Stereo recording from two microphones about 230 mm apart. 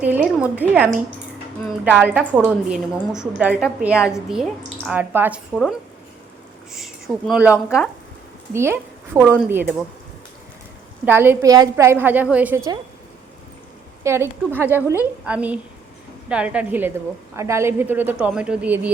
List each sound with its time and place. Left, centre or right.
0.0 s a woman's voice: centre
6.7 s a woman's voice: centre
11.0 s a woman's voice: centre
14.0 s a woman's voice: centre